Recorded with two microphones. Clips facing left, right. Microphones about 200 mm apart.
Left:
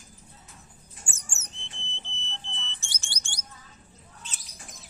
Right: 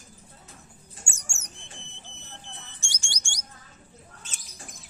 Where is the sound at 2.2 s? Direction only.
50° right (ahead or behind).